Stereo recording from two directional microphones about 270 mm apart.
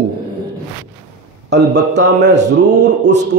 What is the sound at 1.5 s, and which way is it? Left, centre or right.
Speech, right.